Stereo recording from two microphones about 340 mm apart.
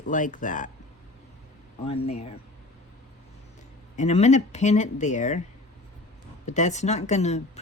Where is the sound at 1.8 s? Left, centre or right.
Centre.